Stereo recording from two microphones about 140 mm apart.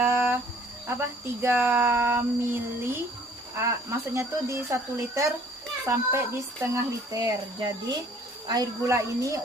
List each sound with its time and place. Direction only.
0.0 s cricket: 15° right (ahead or behind)
0.9 s speech: 15° right (ahead or behind)
8.4 s speech: 25° right (ahead or behind)